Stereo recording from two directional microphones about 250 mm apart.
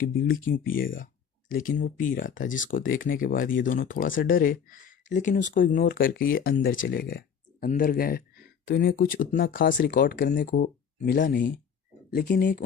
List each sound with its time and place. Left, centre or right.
0.3 s speech: left